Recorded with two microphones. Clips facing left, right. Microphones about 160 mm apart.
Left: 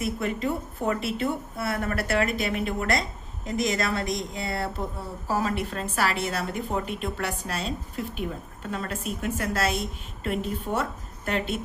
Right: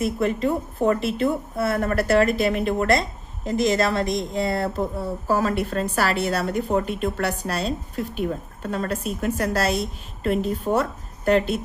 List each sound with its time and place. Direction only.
0.0 s a woman's voice: 35° right (ahead or behind)